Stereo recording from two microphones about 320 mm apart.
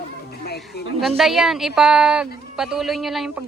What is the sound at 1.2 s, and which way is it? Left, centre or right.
A woman's voice, centre.